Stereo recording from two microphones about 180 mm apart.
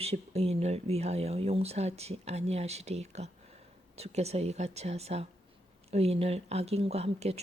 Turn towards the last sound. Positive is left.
turn(degrees=-35)  # may be behind; listen again after turning